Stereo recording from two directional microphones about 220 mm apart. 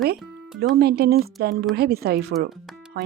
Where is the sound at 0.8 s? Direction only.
45° right (ahead or behind).